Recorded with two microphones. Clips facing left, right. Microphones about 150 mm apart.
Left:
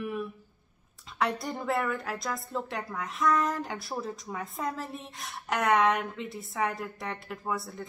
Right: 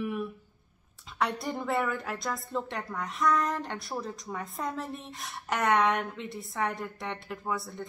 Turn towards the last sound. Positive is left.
turn(degrees=0)  # may be behind; listen again after turning